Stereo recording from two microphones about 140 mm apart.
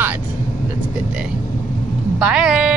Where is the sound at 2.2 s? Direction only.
5° right (ahead or behind).